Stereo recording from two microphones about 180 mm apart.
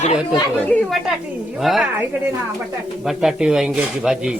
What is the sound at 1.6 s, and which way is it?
Speech, centre (ahead or behind).